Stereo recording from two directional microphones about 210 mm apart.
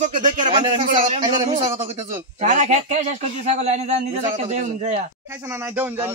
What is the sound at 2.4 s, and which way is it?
A man's voice, 35° right (ahead or behind).